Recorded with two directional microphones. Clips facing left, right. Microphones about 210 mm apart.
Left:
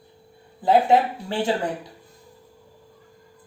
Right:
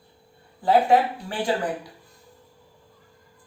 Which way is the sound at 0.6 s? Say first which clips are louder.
Left 1 dB; 25° left (ahead or behind).